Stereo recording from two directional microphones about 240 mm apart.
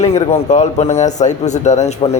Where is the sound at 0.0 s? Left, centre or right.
Left.